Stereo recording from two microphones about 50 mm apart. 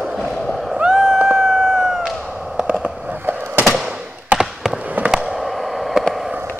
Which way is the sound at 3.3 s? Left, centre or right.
Right.